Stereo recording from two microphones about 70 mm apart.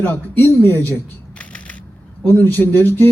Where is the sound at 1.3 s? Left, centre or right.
Centre.